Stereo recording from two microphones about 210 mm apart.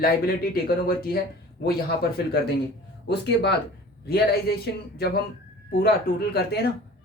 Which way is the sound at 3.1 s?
50° left (ahead or behind).